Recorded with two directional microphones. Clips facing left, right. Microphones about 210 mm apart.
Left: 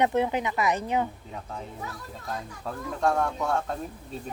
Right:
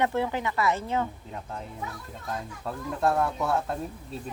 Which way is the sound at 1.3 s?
Centre (ahead or behind).